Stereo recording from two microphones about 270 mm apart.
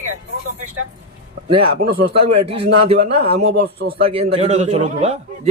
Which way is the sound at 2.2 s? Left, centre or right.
Right.